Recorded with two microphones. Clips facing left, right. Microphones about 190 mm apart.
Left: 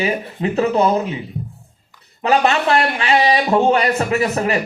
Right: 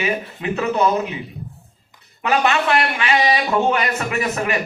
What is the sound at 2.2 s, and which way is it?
A man's voice, 35° left (ahead or behind).